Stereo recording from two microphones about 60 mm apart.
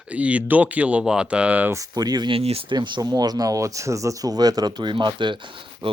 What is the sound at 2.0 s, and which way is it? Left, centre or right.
Speech, right.